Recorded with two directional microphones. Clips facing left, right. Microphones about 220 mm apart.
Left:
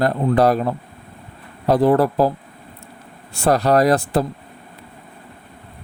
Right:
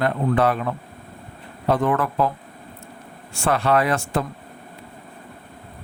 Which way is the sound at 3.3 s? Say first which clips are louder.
Left 4 dB; 35° left (ahead or behind).